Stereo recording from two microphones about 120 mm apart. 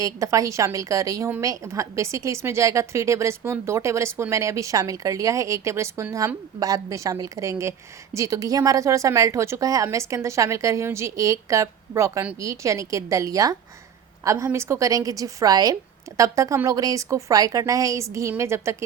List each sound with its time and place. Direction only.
0.0 s a woman's voice: 25° right (ahead or behind)